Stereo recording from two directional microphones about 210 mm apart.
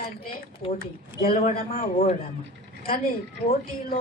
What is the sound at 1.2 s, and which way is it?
Speech, 45° left (ahead or behind).